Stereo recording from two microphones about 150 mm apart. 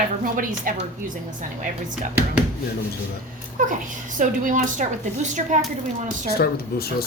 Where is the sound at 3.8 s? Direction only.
60° right (ahead or behind).